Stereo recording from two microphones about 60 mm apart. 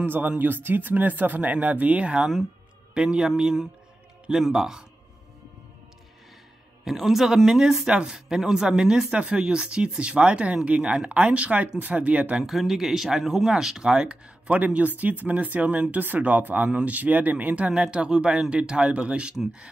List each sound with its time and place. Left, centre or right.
0.0 s speech: right; by 4.8 s centre
6.8 s speech: centre; by 12.4 s right
12.4 s speech: centre